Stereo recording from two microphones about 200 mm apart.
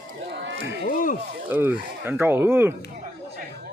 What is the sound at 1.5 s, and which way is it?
Speech, 10° right (ahead or behind).